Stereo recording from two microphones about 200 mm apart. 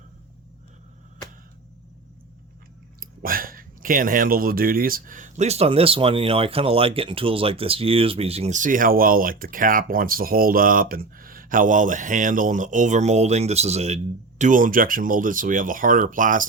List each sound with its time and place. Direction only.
3.0 s speech: 45° right (ahead or behind)